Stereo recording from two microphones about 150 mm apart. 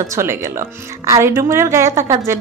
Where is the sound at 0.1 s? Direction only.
15° right (ahead or behind).